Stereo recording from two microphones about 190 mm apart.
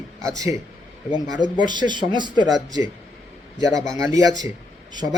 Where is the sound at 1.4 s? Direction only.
25° right (ahead or behind).